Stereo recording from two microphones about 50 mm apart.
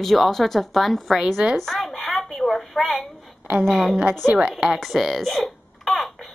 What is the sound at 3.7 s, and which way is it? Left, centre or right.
Speech, centre.